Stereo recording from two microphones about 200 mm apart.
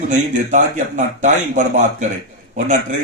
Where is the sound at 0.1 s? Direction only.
35° right (ahead or behind).